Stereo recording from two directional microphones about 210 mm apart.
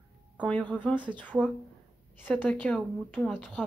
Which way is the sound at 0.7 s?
5° left (ahead or behind).